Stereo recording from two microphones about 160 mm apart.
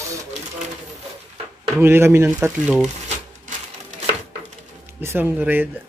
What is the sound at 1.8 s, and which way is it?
Speech, 15° right (ahead or behind).